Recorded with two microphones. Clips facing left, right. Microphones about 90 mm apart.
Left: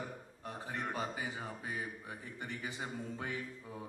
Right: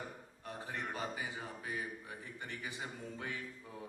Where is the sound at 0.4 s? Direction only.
20° left (ahead or behind).